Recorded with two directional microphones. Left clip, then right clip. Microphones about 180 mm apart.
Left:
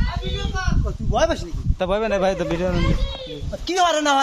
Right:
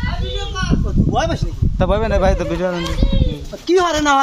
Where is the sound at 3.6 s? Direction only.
45° left (ahead or behind).